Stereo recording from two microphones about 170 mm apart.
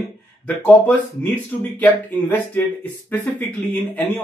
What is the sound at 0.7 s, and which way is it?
Speech, 10° left (ahead or behind).